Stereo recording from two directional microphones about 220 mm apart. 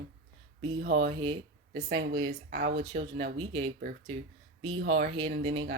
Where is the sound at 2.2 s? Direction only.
50° right (ahead or behind).